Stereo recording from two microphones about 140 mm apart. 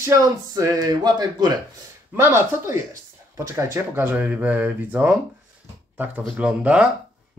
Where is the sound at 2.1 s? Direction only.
20° right (ahead or behind).